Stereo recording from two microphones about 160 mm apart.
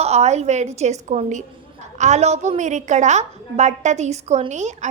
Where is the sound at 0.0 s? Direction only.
45° right (ahead or behind).